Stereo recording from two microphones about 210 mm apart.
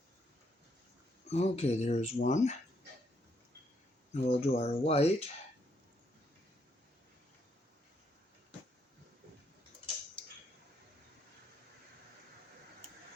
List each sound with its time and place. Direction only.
1.3 s speech: 30° left (ahead or behind)
4.1 s speech: 30° left (ahead or behind)